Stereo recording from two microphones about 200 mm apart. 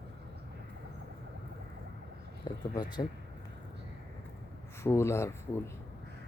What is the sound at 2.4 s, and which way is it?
Speech, 20° left (ahead or behind).